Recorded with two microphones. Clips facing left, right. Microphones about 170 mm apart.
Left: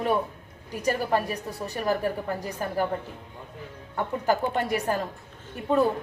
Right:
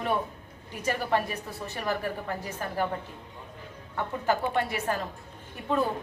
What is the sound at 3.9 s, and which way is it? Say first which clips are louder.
Speech: left 3 dB; 40° left (ahead or behind).